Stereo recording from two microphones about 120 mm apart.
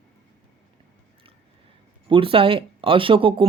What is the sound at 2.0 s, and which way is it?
Speech, 45° right (ahead or behind).